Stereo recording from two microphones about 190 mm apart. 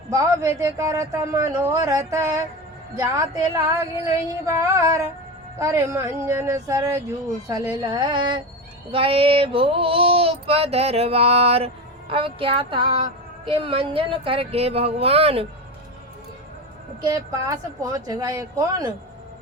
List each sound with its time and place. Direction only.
0.1 s a man's voice: 15° right (ahead or behind)
7.4 s female singing: 20° right (ahead or behind)
17.0 s female singing: 20° right (ahead or behind)